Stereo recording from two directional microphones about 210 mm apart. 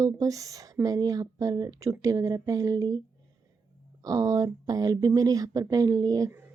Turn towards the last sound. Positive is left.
turn(degrees=-15)  # may be behind; listen again after turning